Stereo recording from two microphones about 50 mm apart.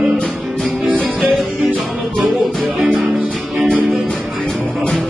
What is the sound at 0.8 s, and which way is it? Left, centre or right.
Music, right.